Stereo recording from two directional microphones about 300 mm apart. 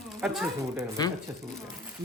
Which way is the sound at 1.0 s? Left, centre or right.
Centre.